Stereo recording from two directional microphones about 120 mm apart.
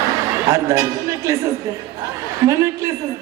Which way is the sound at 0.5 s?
25° right (ahead or behind).